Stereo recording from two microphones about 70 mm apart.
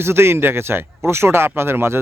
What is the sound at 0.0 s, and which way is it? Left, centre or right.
Speech, right.